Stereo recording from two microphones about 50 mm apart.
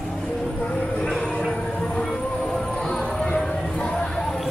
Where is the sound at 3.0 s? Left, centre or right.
Centre.